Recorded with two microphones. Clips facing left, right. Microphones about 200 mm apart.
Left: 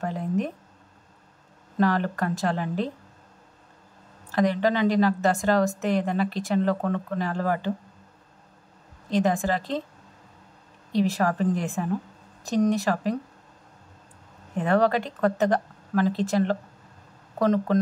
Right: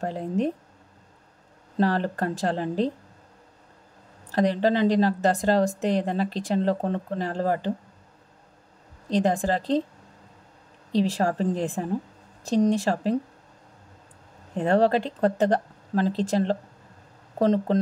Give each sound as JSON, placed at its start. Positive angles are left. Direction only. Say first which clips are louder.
{"t": 0.0, "sound": "a sound", "louder": "right 1 dB", "side_deg": -30}
{"t": 1.8, "sound": "a woman's voice", "louder": "even", "side_deg": -35}
{"t": 4.3, "sound": "a woman's voice", "louder": "right 1 dB", "side_deg": -35}
{"t": 9.1, "sound": "a woman's voice", "louder": "right 1 dB", "side_deg": -35}
{"t": 10.9, "sound": "a woman's voice", "louder": "even", "side_deg": -30}
{"t": 14.5, "sound": "a woman's voice", "louder": "right 1 dB", "side_deg": -30}